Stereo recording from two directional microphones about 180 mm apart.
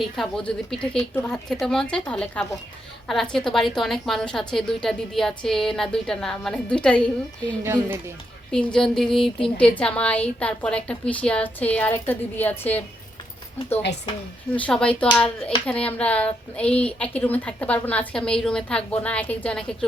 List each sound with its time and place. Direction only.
0.0 s a woman's voice: centre (ahead or behind)
7.6 s speech: 15° right (ahead or behind)
8.5 s a woman's voice: 5° left (ahead or behind)
14.5 s speech: 5° left (ahead or behind)